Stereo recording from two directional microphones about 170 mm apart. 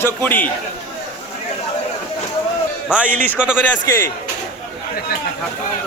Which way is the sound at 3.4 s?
5° right (ahead or behind).